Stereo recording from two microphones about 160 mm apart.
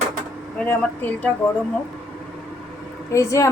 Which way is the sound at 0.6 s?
10° left (ahead or behind).